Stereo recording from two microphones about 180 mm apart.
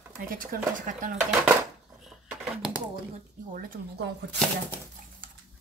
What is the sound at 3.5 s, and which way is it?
Speech, 50° right (ahead or behind).